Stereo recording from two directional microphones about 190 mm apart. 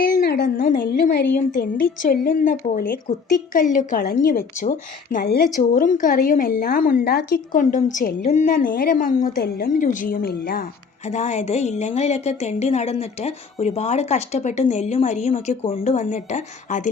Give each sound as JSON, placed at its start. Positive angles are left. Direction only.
{"t": 0.0, "sound": "a woman's voice", "side_deg": 50}
{"t": 5.5, "sound": "a woman's voice", "side_deg": 45}
{"t": 11.0, "sound": "speech", "side_deg": 35}